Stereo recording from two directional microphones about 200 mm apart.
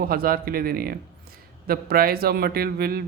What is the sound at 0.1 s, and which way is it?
A man's voice, 50° right (ahead or behind).